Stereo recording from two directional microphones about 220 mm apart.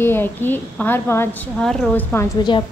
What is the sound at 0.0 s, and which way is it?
A woman's voice, 10° left (ahead or behind).